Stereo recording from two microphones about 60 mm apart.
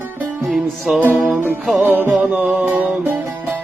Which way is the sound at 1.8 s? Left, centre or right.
Right.